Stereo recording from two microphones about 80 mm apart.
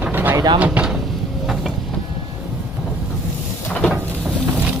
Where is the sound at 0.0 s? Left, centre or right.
Right.